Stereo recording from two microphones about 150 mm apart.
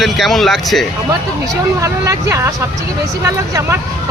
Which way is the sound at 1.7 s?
20° right (ahead or behind).